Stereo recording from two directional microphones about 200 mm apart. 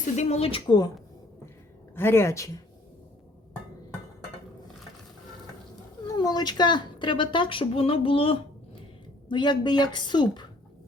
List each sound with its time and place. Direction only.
0.2 s a woman's voice: 30° left (ahead or behind)
2.0 s a woman's voice: 10° left (ahead or behind)
6.1 s a woman's voice: 20° left (ahead or behind)